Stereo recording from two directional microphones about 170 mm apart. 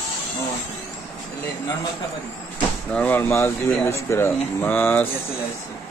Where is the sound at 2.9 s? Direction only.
10° left (ahead or behind).